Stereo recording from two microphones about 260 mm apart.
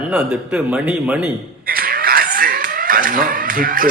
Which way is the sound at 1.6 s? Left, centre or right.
Right.